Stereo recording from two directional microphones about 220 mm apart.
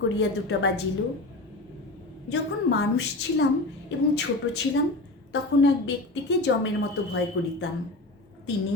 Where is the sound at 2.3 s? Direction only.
50° left (ahead or behind).